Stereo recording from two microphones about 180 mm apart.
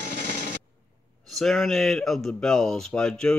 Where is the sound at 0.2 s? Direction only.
45° right (ahead or behind).